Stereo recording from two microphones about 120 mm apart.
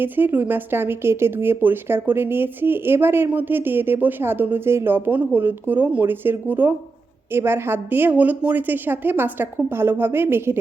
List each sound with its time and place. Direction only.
0.0 s speech: 15° right (ahead or behind)